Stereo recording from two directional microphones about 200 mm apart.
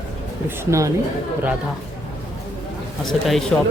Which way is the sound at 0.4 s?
15° right (ahead or behind).